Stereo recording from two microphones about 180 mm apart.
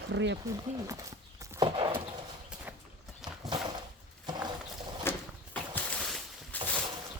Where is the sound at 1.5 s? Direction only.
25° right (ahead or behind).